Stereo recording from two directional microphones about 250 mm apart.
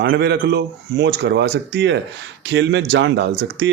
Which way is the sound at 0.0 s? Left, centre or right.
Right.